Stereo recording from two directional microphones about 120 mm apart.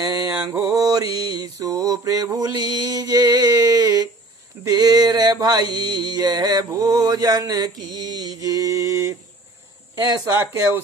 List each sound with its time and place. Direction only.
0.0 s mantra: 30° right (ahead or behind)